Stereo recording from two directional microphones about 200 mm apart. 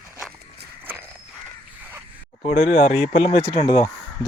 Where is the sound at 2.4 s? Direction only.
30° left (ahead or behind).